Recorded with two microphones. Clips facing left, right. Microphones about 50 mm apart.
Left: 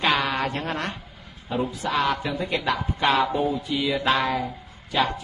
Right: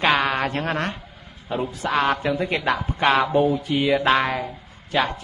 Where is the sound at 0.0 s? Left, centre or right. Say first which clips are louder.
Right 3 dB; right.